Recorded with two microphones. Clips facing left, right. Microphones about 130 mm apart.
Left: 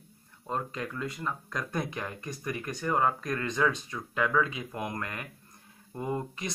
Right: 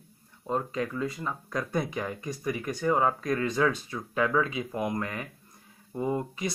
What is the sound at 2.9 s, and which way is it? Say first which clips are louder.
Speech: right 2 dB; 15° right (ahead or behind).